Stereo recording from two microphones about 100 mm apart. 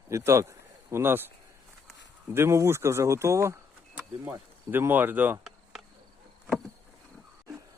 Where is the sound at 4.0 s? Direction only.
20° right (ahead or behind).